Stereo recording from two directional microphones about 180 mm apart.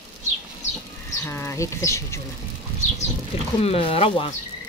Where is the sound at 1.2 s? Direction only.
15° left (ahead or behind).